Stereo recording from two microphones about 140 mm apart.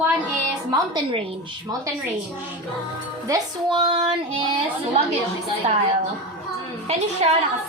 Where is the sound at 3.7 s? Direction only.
40° right (ahead or behind).